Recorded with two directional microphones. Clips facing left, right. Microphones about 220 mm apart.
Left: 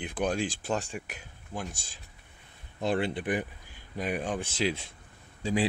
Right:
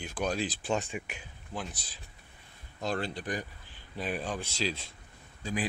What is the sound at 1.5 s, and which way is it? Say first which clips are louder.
Speech: left 1 dB; 10° left (ahead or behind).